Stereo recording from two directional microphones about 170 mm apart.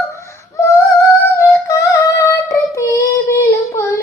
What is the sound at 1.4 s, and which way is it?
Music, 20° left (ahead or behind).